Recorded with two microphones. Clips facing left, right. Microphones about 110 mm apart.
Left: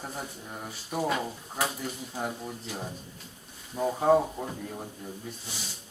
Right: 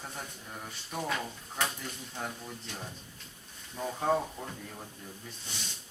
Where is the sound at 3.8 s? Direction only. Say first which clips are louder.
Left 7 dB; 15° left (ahead or behind).